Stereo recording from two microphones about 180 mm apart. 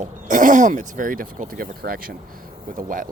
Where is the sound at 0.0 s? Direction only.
45° right (ahead or behind).